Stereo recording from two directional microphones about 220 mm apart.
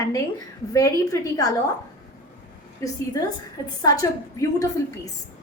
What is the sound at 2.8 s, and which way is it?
Speech, 15° left (ahead or behind).